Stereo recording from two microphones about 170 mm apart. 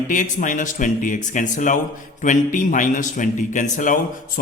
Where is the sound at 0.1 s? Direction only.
50° left (ahead or behind).